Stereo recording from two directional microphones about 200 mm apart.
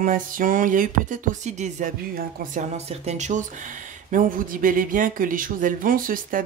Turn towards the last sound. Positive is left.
turn(degrees=-45)  # may be behind; listen again after turning